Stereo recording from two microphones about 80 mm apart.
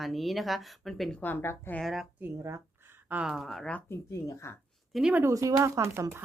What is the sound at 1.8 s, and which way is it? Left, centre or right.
Speech, centre.